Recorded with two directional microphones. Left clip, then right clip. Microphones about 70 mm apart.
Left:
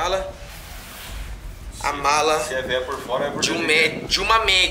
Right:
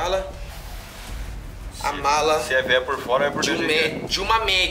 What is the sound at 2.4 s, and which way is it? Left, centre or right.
Speech, right.